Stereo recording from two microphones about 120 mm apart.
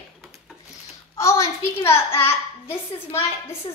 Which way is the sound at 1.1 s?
25° left (ahead or behind).